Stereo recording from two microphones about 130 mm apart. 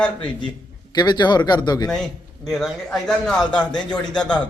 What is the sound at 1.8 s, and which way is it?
A man's voice, 5° left (ahead or behind).